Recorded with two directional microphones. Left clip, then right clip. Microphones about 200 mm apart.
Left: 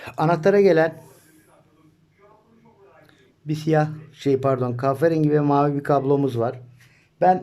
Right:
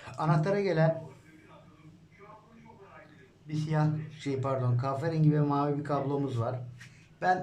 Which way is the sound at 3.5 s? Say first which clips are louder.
Left 12 dB; 55° left (ahead or behind).